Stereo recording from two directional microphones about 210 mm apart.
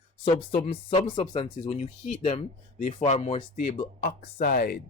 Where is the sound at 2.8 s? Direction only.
35° left (ahead or behind).